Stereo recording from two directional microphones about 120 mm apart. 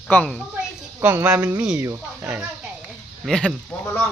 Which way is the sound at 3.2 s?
Centre (ahead or behind).